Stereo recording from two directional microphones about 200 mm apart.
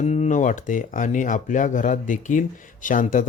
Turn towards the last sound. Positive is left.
turn(degrees=40)  # may be behind; listen again after turning